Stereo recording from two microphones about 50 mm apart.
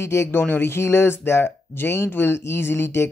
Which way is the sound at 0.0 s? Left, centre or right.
Left.